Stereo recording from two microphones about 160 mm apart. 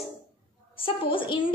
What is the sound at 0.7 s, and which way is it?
Speech, 35° left (ahead or behind).